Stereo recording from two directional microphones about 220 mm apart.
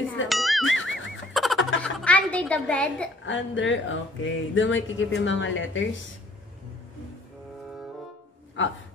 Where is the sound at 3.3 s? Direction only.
60° left (ahead or behind).